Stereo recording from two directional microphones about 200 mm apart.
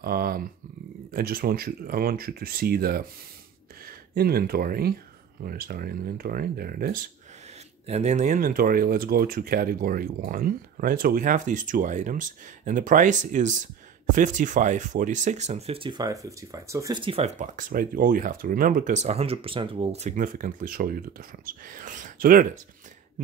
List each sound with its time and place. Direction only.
0.0 s speech: 50° right (ahead or behind)
7.8 s speech: 35° right (ahead or behind)